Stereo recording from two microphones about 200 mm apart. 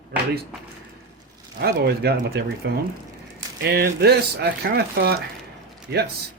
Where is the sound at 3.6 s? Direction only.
55° right (ahead or behind).